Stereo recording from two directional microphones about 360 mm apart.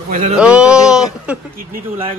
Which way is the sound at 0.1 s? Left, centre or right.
Centre.